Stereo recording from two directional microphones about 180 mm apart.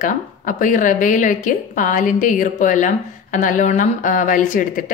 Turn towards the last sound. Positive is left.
turn(degrees=50)  # may be behind; listen again after turning